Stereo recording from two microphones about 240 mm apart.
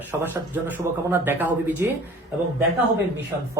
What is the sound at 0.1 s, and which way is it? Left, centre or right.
Speech, centre.